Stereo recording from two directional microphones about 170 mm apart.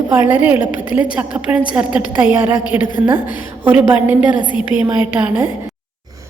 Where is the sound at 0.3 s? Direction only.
10° right (ahead or behind).